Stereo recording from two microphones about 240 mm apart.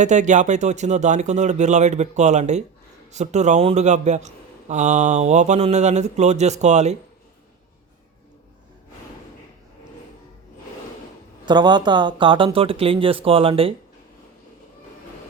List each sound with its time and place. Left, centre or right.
0.0 s speech: right
11.4 s speech: centre